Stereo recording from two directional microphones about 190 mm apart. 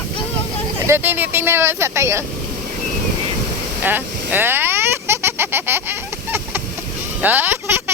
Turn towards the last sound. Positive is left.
turn(degrees=-10)  # may be behind; listen again after turning